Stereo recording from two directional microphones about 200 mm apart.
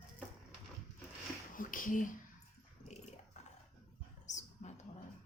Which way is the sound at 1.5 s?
40° left (ahead or behind).